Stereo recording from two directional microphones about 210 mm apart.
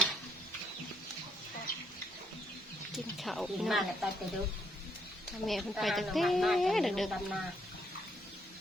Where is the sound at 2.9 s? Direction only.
Centre (ahead or behind).